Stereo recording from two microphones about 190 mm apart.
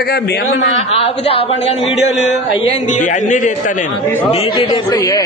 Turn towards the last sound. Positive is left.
turn(degrees=20)  # may be behind; listen again after turning